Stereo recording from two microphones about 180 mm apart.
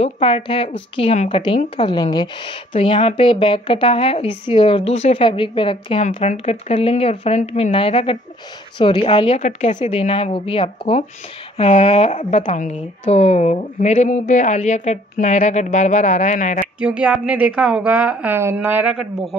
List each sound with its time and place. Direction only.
0.0 s a woman's voice: 30° left (ahead or behind)
1.8 s a woman's voice: 25° left (ahead or behind); by 16.6 s 40° left (ahead or behind)
16.8 s a woman's voice: 5° right (ahead or behind)